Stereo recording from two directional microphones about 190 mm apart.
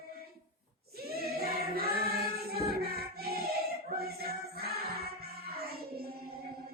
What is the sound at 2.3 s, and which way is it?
Music, 55° right (ahead or behind).